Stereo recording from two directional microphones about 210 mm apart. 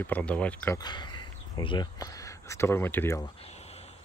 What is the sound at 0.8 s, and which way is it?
Speech, 20° left (ahead or behind).